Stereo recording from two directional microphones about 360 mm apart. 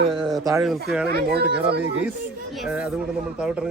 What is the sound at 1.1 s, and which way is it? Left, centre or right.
Speech, right.